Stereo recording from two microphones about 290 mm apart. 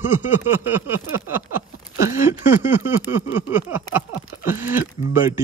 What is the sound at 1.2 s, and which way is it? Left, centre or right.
Speech, centre.